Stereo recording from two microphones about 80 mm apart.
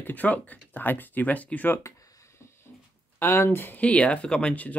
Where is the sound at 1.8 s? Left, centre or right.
Left.